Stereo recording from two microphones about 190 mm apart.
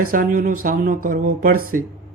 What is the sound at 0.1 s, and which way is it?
Speech, 45° right (ahead or behind).